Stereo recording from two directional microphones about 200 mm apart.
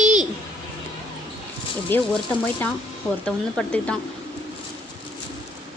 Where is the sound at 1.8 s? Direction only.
10° left (ahead or behind).